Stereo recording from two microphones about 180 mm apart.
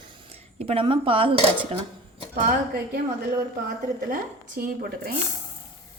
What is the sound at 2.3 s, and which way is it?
Speech, 60° right (ahead or behind).